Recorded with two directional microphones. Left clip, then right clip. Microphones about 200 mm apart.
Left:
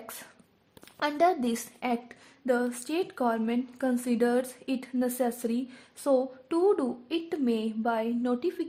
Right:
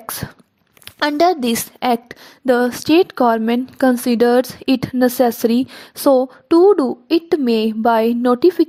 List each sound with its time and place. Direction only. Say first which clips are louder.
0.9 s a woman's voice: right 11 dB; 40° right (ahead or behind)